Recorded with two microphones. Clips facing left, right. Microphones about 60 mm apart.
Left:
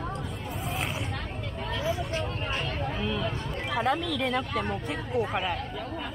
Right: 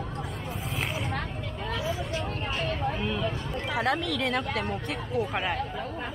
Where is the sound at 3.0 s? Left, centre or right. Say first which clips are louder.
Right 1 dB; centre.